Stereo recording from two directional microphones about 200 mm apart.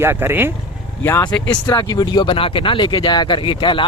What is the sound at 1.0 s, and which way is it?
Speech, 15° left (ahead or behind).